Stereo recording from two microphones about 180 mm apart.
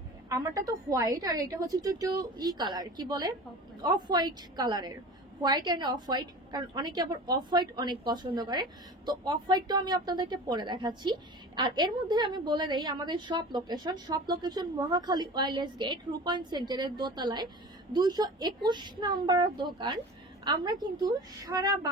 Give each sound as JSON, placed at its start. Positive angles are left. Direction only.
{"t": 0.3, "sound": "a woman's voice", "side_deg": -20}
{"t": 21.5, "sound": "a woman's voice", "side_deg": -20}